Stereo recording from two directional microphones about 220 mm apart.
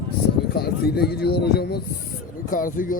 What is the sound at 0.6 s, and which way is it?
Speech, 45° left (ahead or behind).